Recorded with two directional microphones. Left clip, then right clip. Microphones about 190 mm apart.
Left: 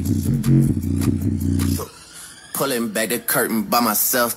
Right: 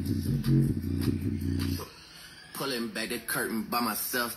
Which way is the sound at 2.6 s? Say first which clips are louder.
Left 11 dB; 55° left (ahead or behind).